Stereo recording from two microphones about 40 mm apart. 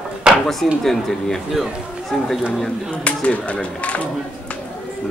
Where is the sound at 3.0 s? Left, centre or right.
Left.